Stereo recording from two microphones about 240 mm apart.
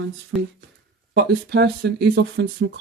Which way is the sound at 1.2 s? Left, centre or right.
Right.